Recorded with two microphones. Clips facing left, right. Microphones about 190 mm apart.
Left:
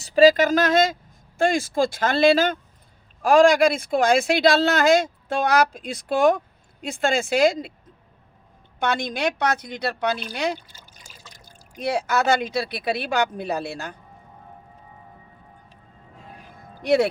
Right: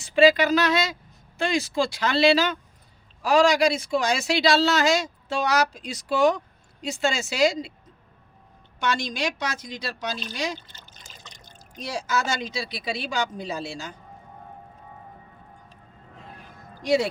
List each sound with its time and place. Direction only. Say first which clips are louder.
0.0 s speech: left 3 dB; 40° left (ahead or behind)
8.8 s speech: left 3 dB; 55° left (ahead or behind)
10.7 s trickle: even; 10° left (ahead or behind)
11.8 s speech: left 5 dB; 60° left (ahead or behind)
16.8 s speech: left 3 dB; 60° left (ahead or behind)